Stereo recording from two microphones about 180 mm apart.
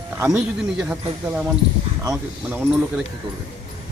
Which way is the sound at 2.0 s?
20° right (ahead or behind).